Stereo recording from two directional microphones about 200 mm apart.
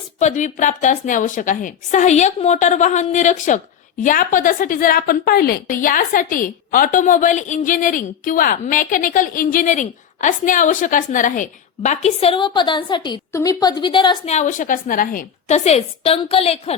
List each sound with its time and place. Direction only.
0.2 s a woman's voice: 40° left (ahead or behind)
14.3 s a woman's voice: 40° left (ahead or behind)